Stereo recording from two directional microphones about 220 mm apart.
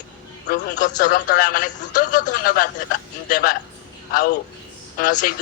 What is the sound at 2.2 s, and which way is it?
A man's voice, 45° left (ahead or behind).